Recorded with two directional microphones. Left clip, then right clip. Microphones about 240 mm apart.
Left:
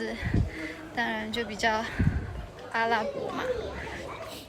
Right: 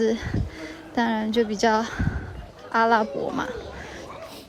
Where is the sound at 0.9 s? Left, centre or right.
Right.